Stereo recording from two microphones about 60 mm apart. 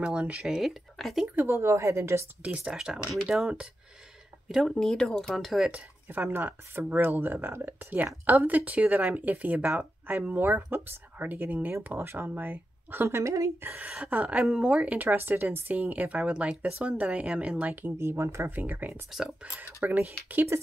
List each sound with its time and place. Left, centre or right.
0.0 s speech: centre
0.4 s speech: centre
1.3 s a woman's voice: right
2.6 s speech: centre
4.6 s speech: centre
6.0 s speech: right
13.1 s speech: right
13.7 s speech: right
14.4 s speech: centre
15.0 s speech: right
17.3 s speech: centre
17.6 s speech: right
17.9 s a woman's voice: right
18.5 s speech: right